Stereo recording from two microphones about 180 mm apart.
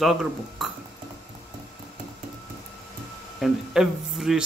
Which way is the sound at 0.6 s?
Centre (ahead or behind).